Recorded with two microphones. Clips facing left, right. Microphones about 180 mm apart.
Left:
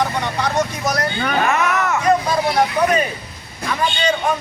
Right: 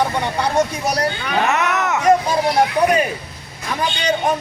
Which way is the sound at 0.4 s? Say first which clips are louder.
Right 2 dB; 30° right (ahead or behind).